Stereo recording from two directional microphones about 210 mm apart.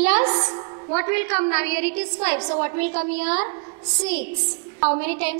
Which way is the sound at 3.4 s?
25° right (ahead or behind).